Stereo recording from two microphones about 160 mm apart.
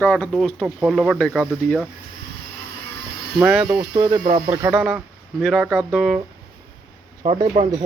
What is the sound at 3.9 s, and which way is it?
Speech, 25° right (ahead or behind).